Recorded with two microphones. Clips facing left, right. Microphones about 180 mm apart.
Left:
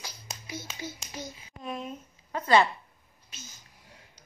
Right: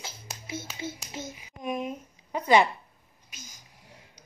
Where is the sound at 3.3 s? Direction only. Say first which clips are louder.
Even; 10° right (ahead or behind).